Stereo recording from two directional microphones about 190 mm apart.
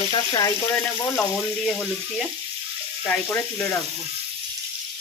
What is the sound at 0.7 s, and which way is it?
Speech, 5° left (ahead or behind).